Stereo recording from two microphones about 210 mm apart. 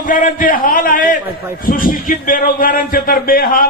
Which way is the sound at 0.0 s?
40° left (ahead or behind).